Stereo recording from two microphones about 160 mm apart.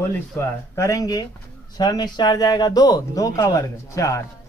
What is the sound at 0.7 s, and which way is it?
Speech, 20° left (ahead or behind).